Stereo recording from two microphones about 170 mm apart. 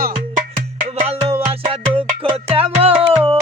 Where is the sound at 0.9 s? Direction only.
40° right (ahead or behind).